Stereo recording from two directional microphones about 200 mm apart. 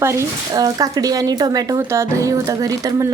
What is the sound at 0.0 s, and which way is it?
A woman's voice, 15° right (ahead or behind).